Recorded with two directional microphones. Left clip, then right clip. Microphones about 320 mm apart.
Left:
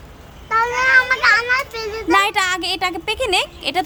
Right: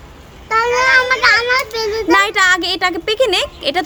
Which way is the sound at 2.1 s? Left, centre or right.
Centre.